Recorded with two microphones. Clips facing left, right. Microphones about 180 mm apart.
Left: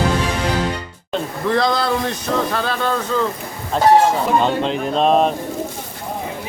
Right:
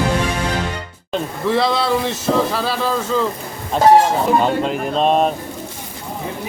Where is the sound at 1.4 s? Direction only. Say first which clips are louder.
Right 1 dB; 5° right (ahead or behind).